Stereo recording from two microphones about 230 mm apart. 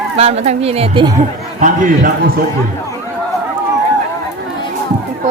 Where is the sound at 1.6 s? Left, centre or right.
Right.